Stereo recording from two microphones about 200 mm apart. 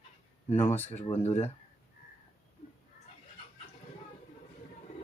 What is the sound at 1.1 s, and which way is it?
Speech, 30° left (ahead or behind).